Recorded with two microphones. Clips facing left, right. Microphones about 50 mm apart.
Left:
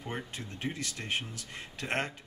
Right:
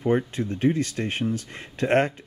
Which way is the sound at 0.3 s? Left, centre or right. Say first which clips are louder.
Right 14 dB; right.